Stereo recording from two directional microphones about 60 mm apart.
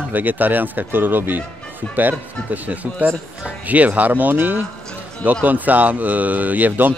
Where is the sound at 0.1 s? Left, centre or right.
Right.